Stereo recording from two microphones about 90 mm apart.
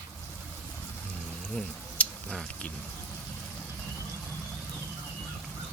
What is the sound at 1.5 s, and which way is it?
Speech, 10° left (ahead or behind).